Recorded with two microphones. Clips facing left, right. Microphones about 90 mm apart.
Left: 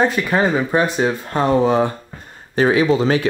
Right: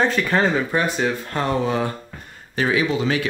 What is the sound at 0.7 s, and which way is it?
Speech, 20° left (ahead or behind).